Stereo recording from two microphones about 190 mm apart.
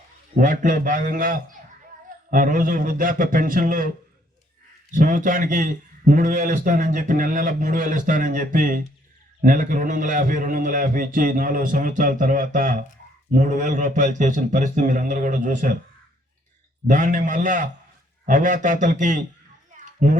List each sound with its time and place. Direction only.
0.3 s a man's voice: 45° right (ahead or behind)
4.9 s a man's voice: 45° right (ahead or behind)
16.8 s a man's voice: 45° right (ahead or behind)
19.7 s a sound: 40° right (ahead or behind)